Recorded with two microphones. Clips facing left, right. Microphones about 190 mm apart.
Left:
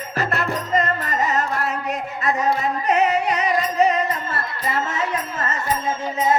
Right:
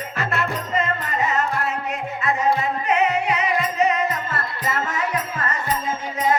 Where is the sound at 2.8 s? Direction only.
40° left (ahead or behind).